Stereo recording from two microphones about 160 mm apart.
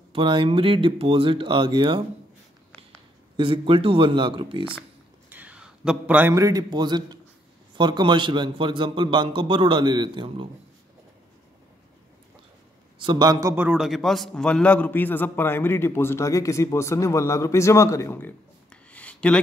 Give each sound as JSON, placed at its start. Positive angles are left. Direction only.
{"t": 0.1, "sound": "a man's voice", "side_deg": -30}
{"t": 3.3, "sound": "a man's voice", "side_deg": -35}
{"t": 5.3, "sound": "a man's voice", "side_deg": -10}
{"t": 13.0, "sound": "a man's voice", "side_deg": -25}
{"t": 13.7, "sound": "a man's voice", "side_deg": 0}
{"t": 18.9, "sound": "a sound", "side_deg": 10}